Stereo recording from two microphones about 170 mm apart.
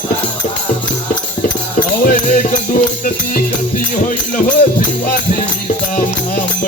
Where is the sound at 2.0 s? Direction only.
50° left (ahead or behind).